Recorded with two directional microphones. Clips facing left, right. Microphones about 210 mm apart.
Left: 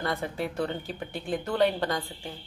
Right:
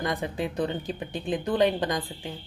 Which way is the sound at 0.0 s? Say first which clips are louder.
Right 2 dB; 15° right (ahead or behind).